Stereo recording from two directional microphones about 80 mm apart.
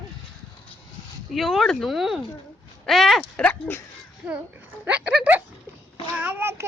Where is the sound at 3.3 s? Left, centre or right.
Centre.